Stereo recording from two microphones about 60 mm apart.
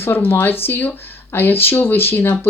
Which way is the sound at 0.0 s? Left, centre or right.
Left.